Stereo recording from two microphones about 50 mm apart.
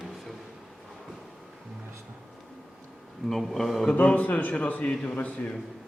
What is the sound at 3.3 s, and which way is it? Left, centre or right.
Speech, centre.